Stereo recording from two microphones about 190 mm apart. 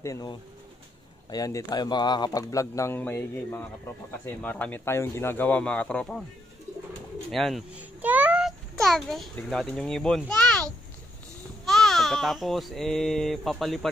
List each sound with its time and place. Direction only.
0.0 s a man's voice: 20° left (ahead or behind)
7.2 s a child's voice: centre (ahead or behind)
11.6 s speech: centre (ahead or behind)